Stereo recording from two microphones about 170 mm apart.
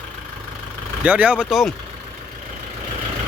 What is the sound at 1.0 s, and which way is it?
Speech, 10° right (ahead or behind).